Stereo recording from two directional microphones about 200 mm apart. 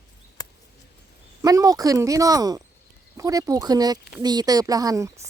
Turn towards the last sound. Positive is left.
turn(degrees=-15)  # may be behind; listen again after turning